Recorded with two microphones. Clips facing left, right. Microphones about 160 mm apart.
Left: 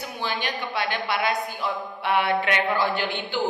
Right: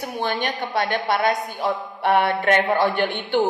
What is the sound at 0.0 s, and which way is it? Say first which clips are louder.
A woman's voice: right 5 dB; 50° right (ahead or behind).